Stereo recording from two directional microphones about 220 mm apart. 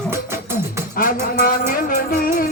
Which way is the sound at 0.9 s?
40° left (ahead or behind).